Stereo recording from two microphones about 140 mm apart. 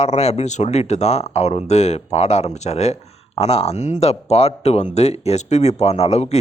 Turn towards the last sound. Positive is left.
turn(degrees=50)  # may be behind; listen again after turning